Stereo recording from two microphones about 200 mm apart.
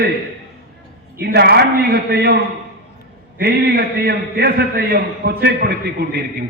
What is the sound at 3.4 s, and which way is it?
A man's voice, 50° right (ahead or behind).